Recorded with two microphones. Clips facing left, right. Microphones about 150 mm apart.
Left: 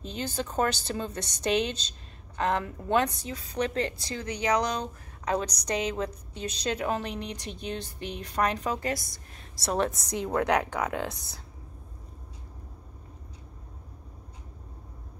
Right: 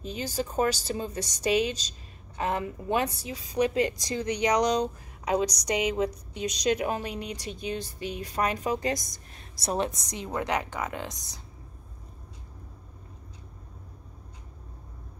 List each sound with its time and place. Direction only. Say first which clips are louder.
0.0 s speech: right 1 dB; 10° right (ahead or behind)
9.8 s a woman's voice: left 4 dB; 55° left (ahead or behind)
10.8 s speech: left 3 dB; centre (ahead or behind)